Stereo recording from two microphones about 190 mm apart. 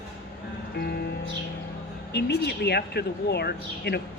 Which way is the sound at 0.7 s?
55° left (ahead or behind).